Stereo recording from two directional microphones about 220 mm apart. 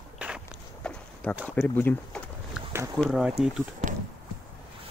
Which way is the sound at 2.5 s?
10° right (ahead or behind).